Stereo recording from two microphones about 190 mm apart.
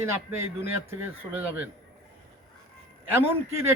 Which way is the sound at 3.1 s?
10° right (ahead or behind).